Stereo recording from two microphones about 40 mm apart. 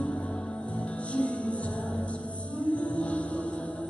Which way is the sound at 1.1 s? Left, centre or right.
Left.